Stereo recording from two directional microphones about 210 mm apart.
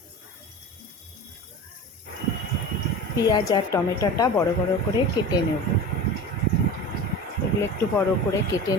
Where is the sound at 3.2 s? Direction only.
20° left (ahead or behind).